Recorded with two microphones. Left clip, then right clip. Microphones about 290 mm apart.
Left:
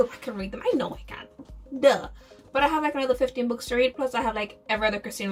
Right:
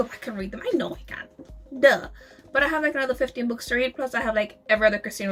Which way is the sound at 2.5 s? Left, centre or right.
Centre.